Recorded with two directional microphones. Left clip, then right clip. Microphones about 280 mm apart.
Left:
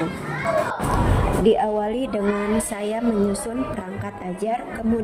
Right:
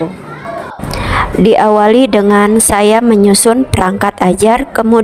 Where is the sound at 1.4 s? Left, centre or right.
Right.